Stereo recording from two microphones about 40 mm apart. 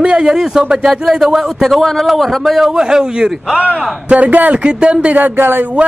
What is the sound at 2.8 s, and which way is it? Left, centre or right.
Speech, centre.